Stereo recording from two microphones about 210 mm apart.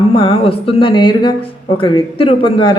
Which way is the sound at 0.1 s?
25° left (ahead or behind).